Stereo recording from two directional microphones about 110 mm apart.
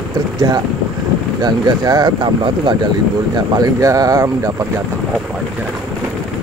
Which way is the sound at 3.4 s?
35° right (ahead or behind).